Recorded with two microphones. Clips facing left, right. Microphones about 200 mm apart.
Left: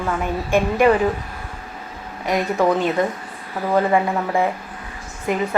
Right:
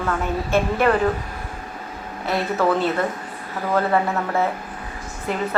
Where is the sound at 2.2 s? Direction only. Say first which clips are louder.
Left 2 dB; 15° left (ahead or behind).